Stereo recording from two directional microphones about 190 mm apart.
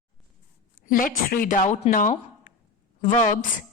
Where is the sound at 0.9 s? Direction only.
45° left (ahead or behind).